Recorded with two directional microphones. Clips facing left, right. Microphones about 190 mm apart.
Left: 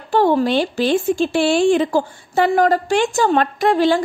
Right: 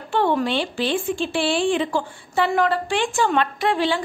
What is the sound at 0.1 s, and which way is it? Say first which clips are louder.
A woman's voice: left 5 dB; 35° left (ahead or behind).